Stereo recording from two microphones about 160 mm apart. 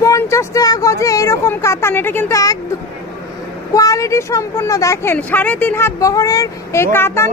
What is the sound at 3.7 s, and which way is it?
A woman's voice, 20° left (ahead or behind).